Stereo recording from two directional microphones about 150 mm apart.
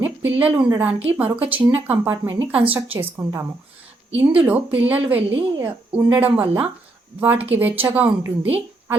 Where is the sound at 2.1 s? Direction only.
25° right (ahead or behind).